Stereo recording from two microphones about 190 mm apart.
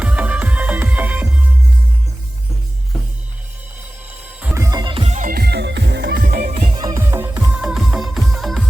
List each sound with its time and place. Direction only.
0.0 s music: 5° right (ahead or behind)
4.4 s music: 10° right (ahead or behind); by 5.3 s 35° right (ahead or behind)
5.3 s music: 55° right (ahead or behind)
6.2 s music: 45° right (ahead or behind)
6.7 s music: 20° right (ahead or behind); by 8.6 s centre (ahead or behind)